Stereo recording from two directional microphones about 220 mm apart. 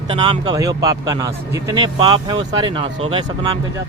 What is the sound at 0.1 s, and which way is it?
Speech, 20° right (ahead or behind).